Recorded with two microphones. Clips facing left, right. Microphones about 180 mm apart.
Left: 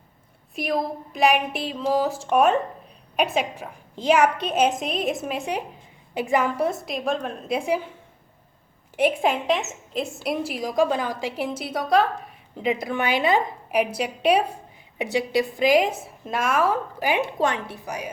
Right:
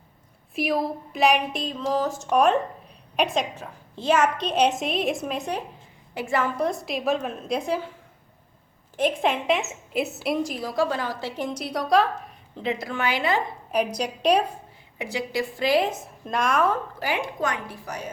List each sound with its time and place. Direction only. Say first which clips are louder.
0.5 s a woman's voice: right 1 dB; 5° right (ahead or behind)
3.5 s a woman's voice: left 2 dB; 15° left (ahead or behind)
6.7 s a woman's voice: even; centre (ahead or behind)
9.0 s a woman's voice: left 2 dB; 5° left (ahead or behind)
12.6 s a woman's voice: left 3 dB; 20° left (ahead or behind)
13.7 s a woman's voice: right 1 dB; 5° left (ahead or behind)
14.9 s a woman's voice: left 5 dB; 20° left (ahead or behind); by 16.7 s 5° left (ahead or behind)
17.4 s a woman's voice: left 4 dB; 25° left (ahead or behind)